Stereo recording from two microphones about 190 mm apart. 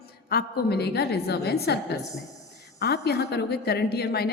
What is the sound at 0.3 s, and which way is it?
A woman's voice, 55° left (ahead or behind).